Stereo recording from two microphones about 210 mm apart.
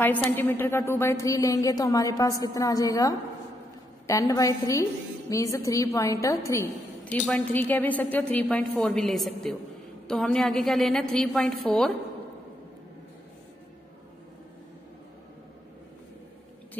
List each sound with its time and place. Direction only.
0.0 s a woman's voice: 10° left (ahead or behind)